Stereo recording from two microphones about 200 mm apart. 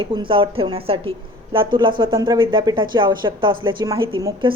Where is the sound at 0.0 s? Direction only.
25° right (ahead or behind).